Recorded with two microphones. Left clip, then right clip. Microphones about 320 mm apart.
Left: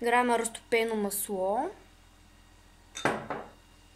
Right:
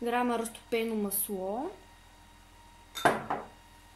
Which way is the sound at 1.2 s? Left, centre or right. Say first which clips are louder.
Left 9 dB; left.